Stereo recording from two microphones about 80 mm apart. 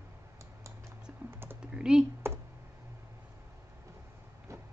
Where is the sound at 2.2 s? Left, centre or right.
Right.